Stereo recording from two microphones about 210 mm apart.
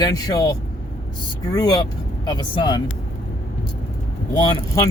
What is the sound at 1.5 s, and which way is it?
Speech, 20° left (ahead or behind).